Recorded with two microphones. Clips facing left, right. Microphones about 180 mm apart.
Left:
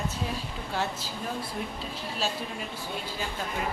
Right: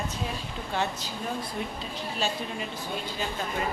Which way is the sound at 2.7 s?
10° left (ahead or behind).